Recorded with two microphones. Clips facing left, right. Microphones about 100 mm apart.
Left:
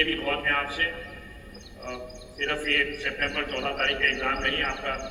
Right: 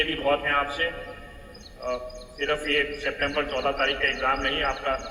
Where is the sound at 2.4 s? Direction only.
35° right (ahead or behind).